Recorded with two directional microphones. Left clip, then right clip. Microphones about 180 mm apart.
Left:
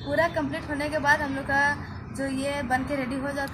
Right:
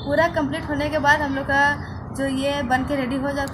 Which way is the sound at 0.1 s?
Centre (ahead or behind).